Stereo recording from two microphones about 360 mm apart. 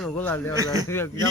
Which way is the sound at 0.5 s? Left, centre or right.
Centre.